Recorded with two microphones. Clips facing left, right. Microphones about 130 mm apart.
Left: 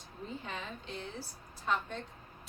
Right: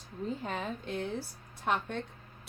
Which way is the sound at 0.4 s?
45° right (ahead or behind).